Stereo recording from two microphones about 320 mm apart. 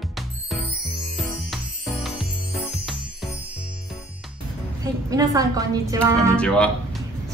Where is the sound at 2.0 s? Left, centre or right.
Centre.